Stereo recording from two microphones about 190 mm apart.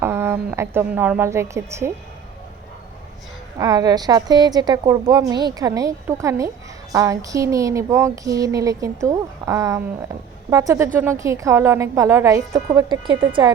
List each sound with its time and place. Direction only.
0.0 s a woman's voice: 15° right (ahead or behind)
3.6 s a woman's voice: 20° right (ahead or behind)
5.3 s a sound: 20° right (ahead or behind)
12.7 s a woman's voice: 25° right (ahead or behind)